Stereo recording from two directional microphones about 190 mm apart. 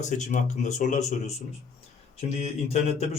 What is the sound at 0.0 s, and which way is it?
Speech, 40° left (ahead or behind).